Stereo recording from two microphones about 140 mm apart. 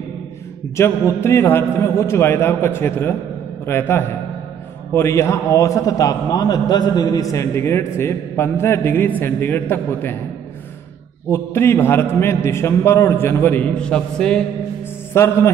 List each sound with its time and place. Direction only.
0.7 s a man's voice: 20° left (ahead or behind)
11.2 s a man's voice: 15° left (ahead or behind)
15.1 s a man's voice: 15° left (ahead or behind)